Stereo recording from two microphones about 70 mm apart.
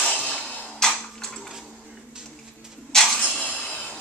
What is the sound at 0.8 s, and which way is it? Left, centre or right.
Tick-tock, centre.